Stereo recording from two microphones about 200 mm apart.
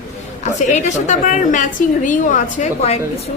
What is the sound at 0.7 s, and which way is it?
A woman's voice, 35° left (ahead or behind).